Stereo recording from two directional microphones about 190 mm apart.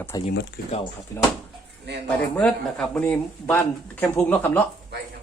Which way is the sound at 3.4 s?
10° left (ahead or behind).